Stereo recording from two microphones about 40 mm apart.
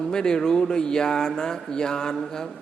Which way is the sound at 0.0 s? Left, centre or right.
Centre.